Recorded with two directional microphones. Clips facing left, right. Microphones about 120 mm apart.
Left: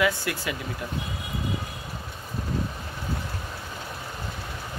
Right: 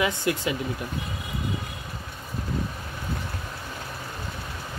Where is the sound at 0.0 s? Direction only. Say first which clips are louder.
Right 1 dB; 20° right (ahead or behind).